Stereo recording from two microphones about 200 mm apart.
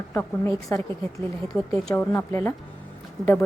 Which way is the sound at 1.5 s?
5° left (ahead or behind).